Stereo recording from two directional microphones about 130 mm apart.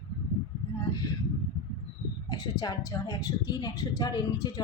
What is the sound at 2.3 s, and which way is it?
A woman's voice, 30° left (ahead or behind).